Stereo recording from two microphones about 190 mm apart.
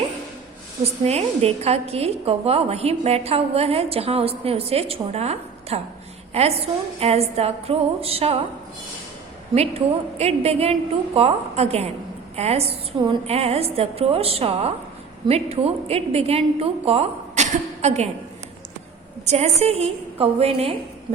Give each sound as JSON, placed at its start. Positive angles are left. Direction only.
{"t": 1.0, "sound": "a woman's voice", "side_deg": -35}
{"t": 9.6, "sound": "a woman's voice", "side_deg": -35}
{"t": 19.2, "sound": "a woman's voice", "side_deg": -35}